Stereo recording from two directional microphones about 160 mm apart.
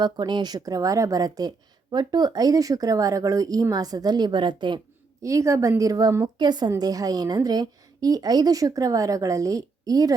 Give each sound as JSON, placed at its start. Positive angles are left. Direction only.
{"t": 0.0, "sound": "a woman's voice", "side_deg": -25}